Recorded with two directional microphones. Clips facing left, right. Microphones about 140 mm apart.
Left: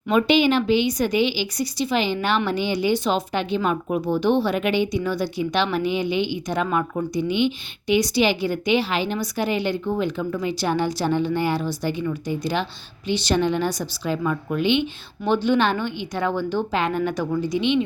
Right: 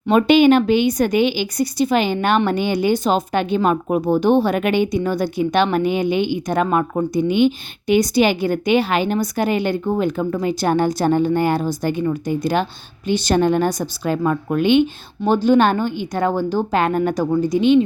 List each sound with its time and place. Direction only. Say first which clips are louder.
0.1 s speech: right 6 dB; 50° right (ahead or behind)